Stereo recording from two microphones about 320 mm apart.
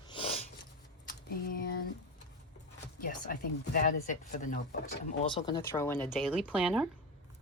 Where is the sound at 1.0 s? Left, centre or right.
Left.